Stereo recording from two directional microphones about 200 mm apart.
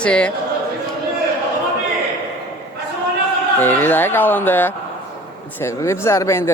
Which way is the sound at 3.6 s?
10° left (ahead or behind).